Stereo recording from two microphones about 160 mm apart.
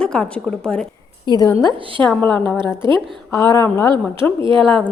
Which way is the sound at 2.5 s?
30° right (ahead or behind).